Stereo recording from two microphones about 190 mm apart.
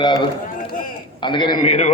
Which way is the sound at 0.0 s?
25° left (ahead or behind).